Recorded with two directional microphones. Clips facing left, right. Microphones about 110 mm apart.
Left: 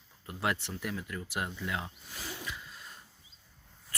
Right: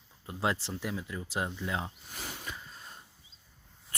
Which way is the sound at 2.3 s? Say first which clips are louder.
Left 3 dB; 35° right (ahead or behind).